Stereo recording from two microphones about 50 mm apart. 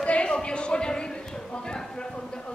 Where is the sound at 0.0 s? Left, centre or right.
Left.